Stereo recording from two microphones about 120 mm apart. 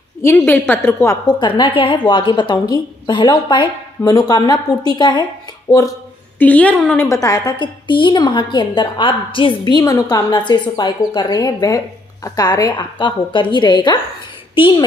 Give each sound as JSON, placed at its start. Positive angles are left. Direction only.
{"t": 0.2, "sound": "a woman's voice", "side_deg": 20}
{"t": 1.2, "sound": "a woman's voice", "side_deg": 40}
{"t": 6.3, "sound": "a woman's voice", "side_deg": 15}
{"t": 7.0, "sound": "a woman's voice", "side_deg": 25}